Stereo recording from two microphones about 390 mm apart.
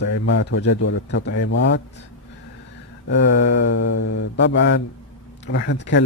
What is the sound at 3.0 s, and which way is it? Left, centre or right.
A man's voice, left.